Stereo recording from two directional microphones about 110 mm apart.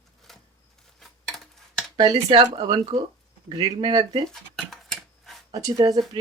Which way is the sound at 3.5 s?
35° right (ahead or behind).